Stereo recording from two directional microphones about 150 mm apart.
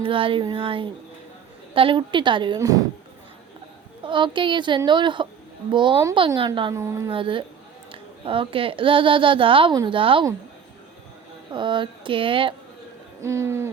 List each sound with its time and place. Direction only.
0.0 s a woman's voice: 35° right (ahead or behind)
4.0 s a woman's voice: 35° right (ahead or behind)
6.7 s hoot: 20° right (ahead or behind)
7.1 s a woman's voice: 35° right (ahead or behind)
11.5 s a woman's voice: 30° right (ahead or behind)
13.2 s hoot: 20° right (ahead or behind)